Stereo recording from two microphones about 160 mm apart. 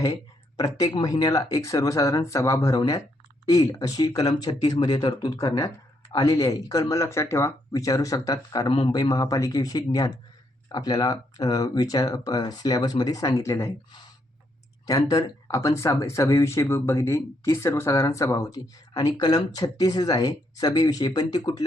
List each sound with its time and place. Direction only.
0.0 s speech: 25° left (ahead or behind)
14.8 s speech: 25° left (ahead or behind)